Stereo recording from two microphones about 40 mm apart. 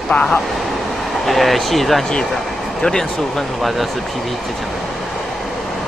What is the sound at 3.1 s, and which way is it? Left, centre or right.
Speech, centre.